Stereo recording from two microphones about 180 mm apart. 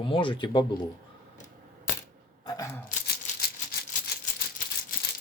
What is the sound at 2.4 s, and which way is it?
Camera, 20° left (ahead or behind).